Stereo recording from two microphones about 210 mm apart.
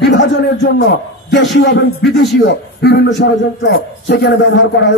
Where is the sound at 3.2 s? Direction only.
55° left (ahead or behind).